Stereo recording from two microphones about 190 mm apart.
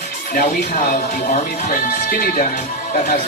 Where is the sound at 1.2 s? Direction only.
45° left (ahead or behind).